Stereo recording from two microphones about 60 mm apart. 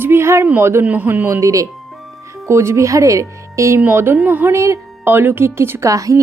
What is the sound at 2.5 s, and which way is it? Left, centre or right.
Speech, right.